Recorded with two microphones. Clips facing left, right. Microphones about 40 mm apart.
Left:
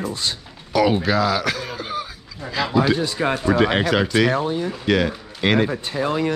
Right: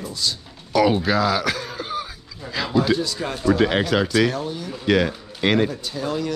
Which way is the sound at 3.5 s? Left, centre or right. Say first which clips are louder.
Right 1 dB; centre.